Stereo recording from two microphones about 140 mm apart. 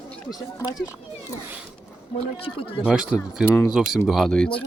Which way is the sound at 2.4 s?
40° left (ahead or behind).